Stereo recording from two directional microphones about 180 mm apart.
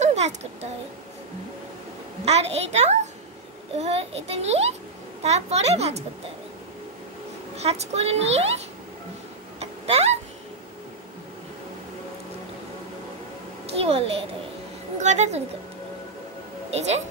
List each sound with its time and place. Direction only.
0.0 s speech: 40° right (ahead or behind)
2.2 s a woman's voice: 35° right (ahead or behind)
7.5 s a woman's voice: 35° right (ahead or behind)
9.6 s a sound: 35° right (ahead or behind)
13.7 s a child's voice: 35° right (ahead or behind)
16.7 s a woman's voice: 35° right (ahead or behind)